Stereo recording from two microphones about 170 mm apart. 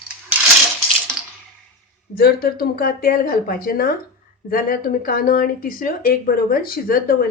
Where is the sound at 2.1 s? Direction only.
65° left (ahead or behind).